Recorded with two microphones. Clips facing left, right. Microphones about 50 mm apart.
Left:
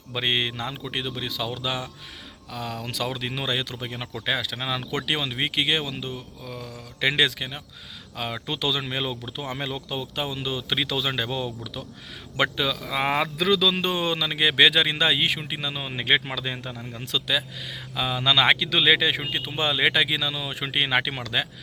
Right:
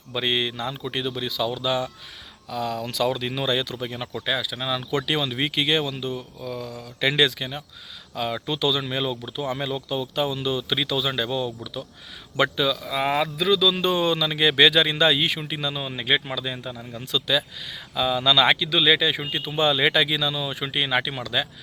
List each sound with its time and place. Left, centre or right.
0.1 s speech: left
0.8 s speech: centre
1.3 s speech: left
4.5 s speech: left
13.3 s speech: left
13.6 s speech: left
16.0 s speech: left
17.1 s speech: left
20.6 s speech: left